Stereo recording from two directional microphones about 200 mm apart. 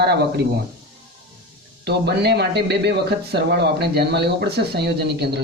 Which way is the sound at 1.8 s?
55° right (ahead or behind).